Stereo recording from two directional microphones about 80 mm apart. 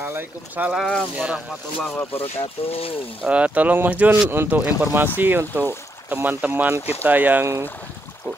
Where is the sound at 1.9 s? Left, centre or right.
Centre.